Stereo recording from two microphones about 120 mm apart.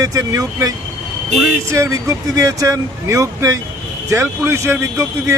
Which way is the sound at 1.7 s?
25° right (ahead or behind).